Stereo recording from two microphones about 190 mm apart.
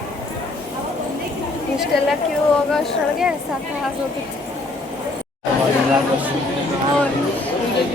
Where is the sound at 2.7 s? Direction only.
Centre (ahead or behind).